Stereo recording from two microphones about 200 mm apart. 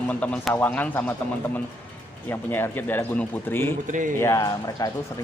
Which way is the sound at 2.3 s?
10° left (ahead or behind).